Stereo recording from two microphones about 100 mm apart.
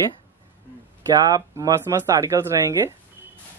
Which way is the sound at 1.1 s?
40° right (ahead or behind).